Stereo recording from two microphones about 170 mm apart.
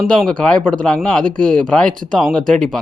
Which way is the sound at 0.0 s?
Centre (ahead or behind).